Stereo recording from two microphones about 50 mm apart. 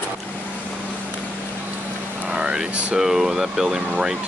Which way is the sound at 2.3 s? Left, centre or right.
Right.